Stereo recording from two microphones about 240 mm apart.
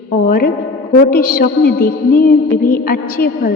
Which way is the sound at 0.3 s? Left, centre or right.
Left.